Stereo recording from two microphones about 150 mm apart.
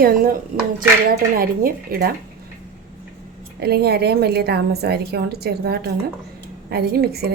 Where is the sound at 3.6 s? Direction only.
90° right.